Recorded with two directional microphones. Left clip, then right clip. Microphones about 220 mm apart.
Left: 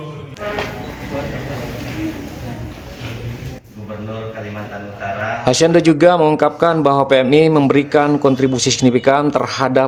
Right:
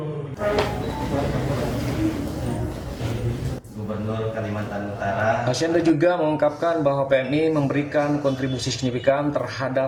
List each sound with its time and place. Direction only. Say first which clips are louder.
5.5 s speech: left 9 dB; 50° left (ahead or behind)